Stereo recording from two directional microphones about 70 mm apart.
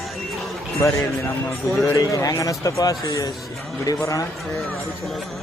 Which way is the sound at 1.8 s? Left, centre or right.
Left.